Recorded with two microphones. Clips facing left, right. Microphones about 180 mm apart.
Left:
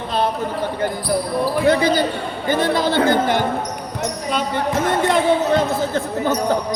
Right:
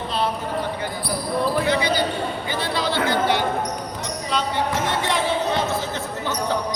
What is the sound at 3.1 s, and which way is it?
Basketball bounce, 50° left (ahead or behind).